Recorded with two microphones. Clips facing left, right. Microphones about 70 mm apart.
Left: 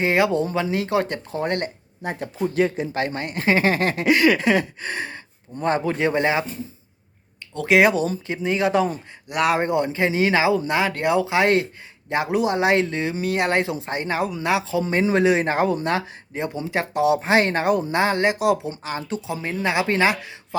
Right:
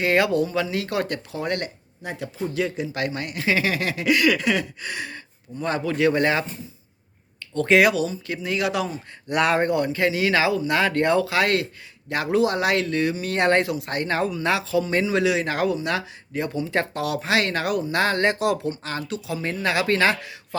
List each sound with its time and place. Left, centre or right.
0.0 s speech: left
7.8 s speech: left
9.3 s speech: centre
9.6 s speech: left
13.3 s speech: centre
13.6 s speech: left